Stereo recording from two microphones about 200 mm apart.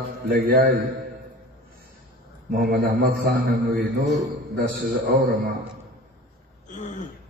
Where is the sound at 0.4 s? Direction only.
50° right (ahead or behind).